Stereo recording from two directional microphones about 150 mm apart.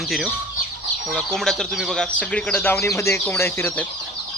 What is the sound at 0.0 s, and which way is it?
Speech, centre (ahead or behind).